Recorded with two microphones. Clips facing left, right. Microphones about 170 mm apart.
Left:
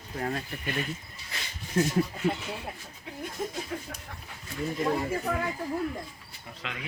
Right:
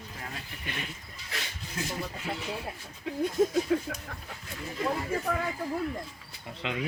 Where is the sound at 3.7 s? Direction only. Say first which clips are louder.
Right 9 dB; 90° right.